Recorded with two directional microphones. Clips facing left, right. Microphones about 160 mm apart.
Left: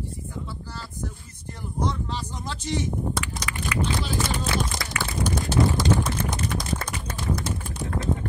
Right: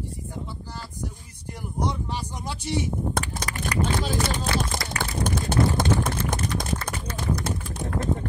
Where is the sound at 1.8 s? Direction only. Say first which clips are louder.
Even; 15° right (ahead or behind).